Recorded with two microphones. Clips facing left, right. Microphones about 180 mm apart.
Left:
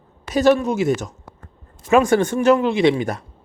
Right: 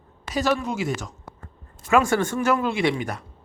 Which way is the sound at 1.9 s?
20° left (ahead or behind).